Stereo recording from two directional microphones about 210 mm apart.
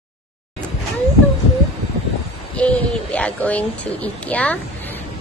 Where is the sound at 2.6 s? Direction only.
5° left (ahead or behind).